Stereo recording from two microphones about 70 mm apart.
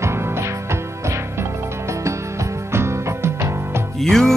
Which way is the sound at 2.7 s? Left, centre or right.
Right.